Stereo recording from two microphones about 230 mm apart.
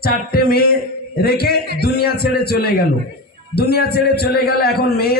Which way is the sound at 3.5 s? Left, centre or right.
Left.